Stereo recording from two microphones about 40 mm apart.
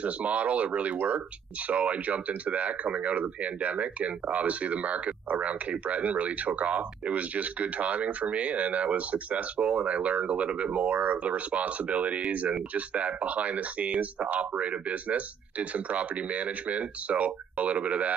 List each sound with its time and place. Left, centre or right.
0.0 s speech: right